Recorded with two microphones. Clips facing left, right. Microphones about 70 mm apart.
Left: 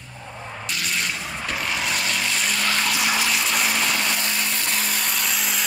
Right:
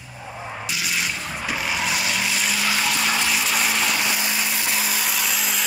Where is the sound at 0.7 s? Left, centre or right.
Centre.